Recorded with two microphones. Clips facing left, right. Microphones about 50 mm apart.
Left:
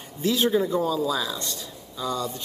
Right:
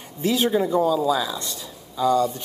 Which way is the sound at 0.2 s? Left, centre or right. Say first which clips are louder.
Right 2 dB; right.